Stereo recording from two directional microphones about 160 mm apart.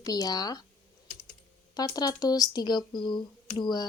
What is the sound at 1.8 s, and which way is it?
A woman's voice, 25° left (ahead or behind).